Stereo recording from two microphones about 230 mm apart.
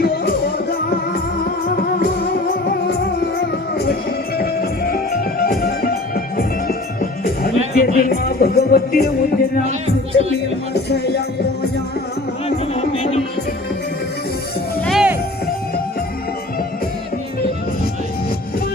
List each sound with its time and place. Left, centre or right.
2.5 s music: left
9.6 s music: right
10.8 s music: left
12.5 s music: left
14.8 s music: centre